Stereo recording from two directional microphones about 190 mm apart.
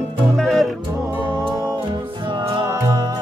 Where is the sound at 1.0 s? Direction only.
20° right (ahead or behind).